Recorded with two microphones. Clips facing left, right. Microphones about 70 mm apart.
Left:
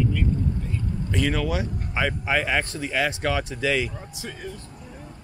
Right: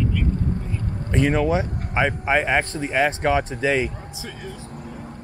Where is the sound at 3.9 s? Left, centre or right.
Centre.